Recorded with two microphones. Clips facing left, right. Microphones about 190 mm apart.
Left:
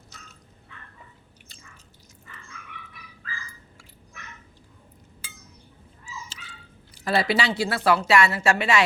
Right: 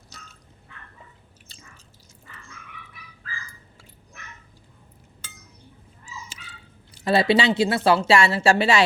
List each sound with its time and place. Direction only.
7.0 s speech: 25° right (ahead or behind)